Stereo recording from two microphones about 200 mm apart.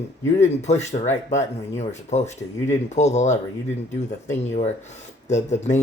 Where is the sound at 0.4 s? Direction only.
35° left (ahead or behind).